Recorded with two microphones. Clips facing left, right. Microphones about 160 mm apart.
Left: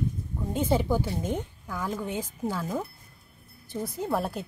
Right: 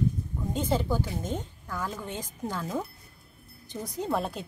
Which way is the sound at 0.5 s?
10° left (ahead or behind).